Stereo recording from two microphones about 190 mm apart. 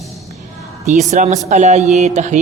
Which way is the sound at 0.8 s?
40° right (ahead or behind).